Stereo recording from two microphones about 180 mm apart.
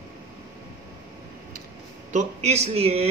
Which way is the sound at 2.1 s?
35° right (ahead or behind).